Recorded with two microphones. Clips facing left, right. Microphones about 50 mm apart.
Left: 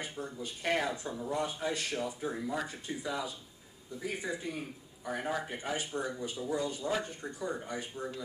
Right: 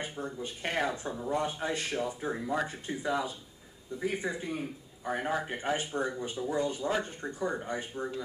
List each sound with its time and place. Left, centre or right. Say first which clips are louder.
0.0 s speech: right 3 dB; right